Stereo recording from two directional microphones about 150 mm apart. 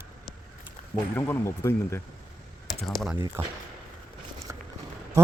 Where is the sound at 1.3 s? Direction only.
15° left (ahead or behind).